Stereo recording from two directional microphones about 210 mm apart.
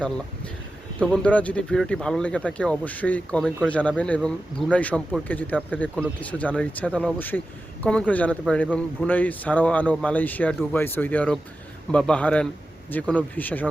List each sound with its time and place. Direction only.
0.9 s a man's voice: 5° left (ahead or behind)